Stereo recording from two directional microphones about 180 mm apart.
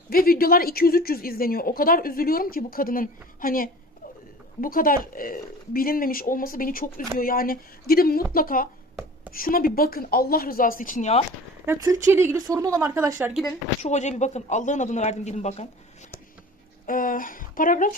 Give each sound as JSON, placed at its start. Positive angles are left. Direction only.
{"t": 0.1, "sound": "speech", "side_deg": 55}
{"t": 11.6, "sound": "speech", "side_deg": -15}
{"t": 13.8, "sound": "speech", "side_deg": 40}